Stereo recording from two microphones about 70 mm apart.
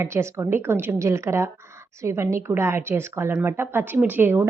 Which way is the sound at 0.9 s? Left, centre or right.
Right.